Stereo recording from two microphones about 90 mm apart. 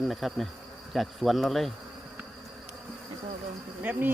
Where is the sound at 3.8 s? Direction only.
20° right (ahead or behind).